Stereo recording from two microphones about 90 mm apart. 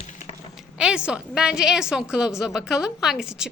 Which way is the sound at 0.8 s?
10° right (ahead or behind).